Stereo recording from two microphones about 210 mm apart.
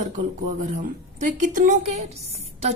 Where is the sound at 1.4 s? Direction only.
40° right (ahead or behind).